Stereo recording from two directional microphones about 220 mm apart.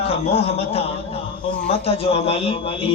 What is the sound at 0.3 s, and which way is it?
Speech, 25° left (ahead or behind).